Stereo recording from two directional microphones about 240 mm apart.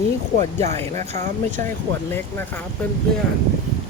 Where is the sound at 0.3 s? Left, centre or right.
Right.